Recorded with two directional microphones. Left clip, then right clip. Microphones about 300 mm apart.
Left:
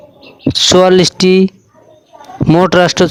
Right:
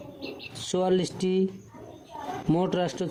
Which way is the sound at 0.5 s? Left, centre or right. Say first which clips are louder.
Left 19 dB; left.